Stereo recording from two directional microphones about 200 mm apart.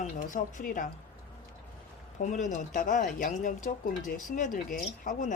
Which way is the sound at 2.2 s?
40° left (ahead or behind).